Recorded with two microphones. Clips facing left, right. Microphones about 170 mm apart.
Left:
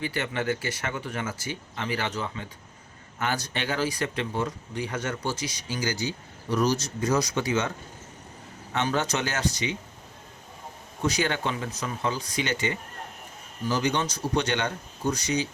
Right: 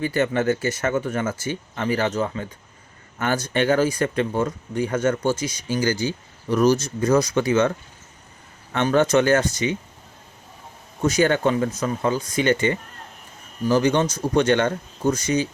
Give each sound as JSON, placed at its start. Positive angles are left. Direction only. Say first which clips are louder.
{"t": 0.0, "sound": "speech", "louder": "right 8 dB", "side_deg": -45}
{"t": 8.7, "sound": "speech", "louder": "right 9 dB", "side_deg": -55}
{"t": 11.0, "sound": "speech", "louder": "right 8 dB", "side_deg": -45}